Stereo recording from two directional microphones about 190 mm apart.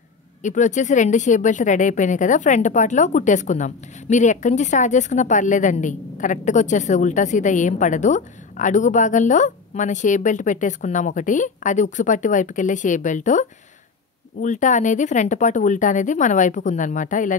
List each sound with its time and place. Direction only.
0.4 s speech: 40° left (ahead or behind)